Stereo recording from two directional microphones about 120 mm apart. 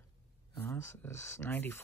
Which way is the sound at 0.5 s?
20° left (ahead or behind).